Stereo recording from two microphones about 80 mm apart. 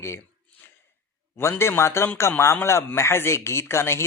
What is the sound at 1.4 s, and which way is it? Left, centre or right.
Speech, left.